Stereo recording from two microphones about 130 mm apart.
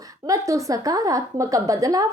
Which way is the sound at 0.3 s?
25° right (ahead or behind).